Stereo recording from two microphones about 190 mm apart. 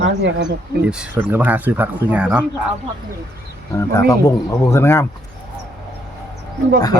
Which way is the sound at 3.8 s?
15° left (ahead or behind).